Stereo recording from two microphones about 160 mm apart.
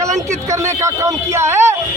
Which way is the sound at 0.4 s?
20° right (ahead or behind).